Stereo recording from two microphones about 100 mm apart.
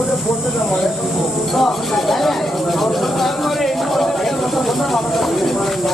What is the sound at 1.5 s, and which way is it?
Speech, centre (ahead or behind).